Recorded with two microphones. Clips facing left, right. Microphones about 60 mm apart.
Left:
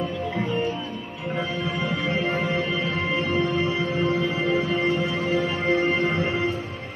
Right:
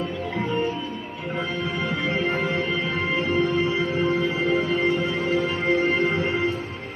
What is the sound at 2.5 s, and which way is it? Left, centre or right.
Music, centre.